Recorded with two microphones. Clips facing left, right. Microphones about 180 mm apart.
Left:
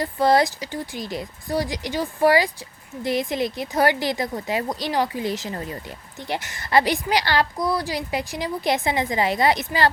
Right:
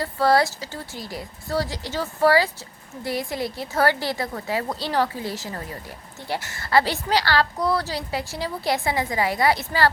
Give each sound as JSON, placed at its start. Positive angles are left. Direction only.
{"t": 0.0, "sound": "speech", "side_deg": 20}